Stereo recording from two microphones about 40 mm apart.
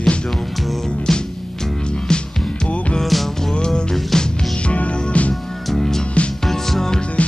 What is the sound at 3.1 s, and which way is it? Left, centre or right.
Music, centre.